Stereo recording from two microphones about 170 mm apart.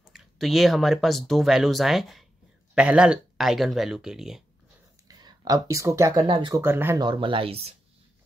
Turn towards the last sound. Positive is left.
turn(degrees=-35)  # may be behind; listen again after turning